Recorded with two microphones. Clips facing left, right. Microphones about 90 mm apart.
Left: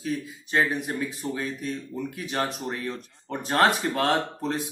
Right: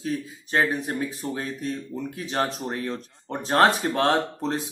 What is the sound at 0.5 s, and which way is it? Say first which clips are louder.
Speech: right 1 dB; 35° right (ahead or behind).